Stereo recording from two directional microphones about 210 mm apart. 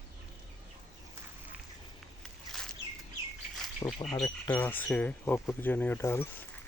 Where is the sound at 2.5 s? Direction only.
Centre (ahead or behind).